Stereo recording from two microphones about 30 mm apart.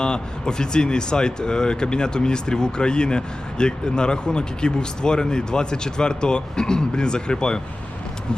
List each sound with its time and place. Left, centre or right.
0.0 s speech: left